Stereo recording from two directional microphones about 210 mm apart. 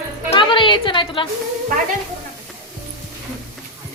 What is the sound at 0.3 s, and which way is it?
Music, 25° left (ahead or behind).